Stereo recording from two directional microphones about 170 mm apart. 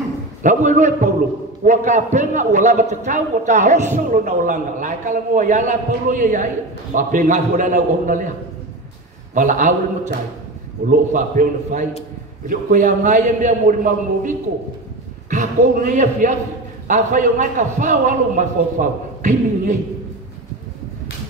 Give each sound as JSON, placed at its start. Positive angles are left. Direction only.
{"t": 0.4, "sound": "a man's voice", "side_deg": -45}
{"t": 9.3, "sound": "a man's voice", "side_deg": -45}